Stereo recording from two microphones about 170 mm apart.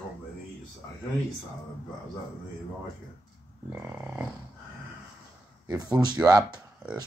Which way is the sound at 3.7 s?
10° right (ahead or behind).